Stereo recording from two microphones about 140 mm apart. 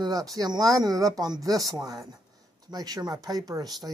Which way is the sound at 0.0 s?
25° right (ahead or behind).